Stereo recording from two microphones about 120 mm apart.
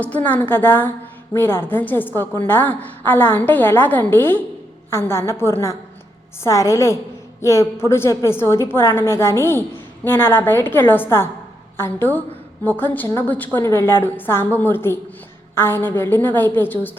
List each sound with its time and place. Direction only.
0.0 s a woman's voice: 15° left (ahead or behind)